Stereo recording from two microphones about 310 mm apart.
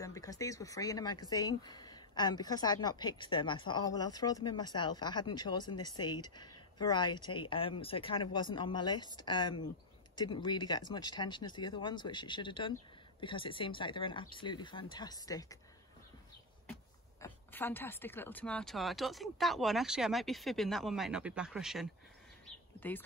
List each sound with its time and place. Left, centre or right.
0.0 s speech: centre
17.2 s a woman's voice: centre